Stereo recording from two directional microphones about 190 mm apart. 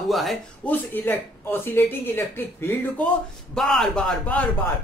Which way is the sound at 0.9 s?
10° left (ahead or behind).